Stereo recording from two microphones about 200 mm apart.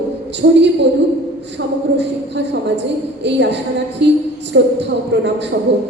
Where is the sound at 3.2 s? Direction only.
60° right (ahead or behind).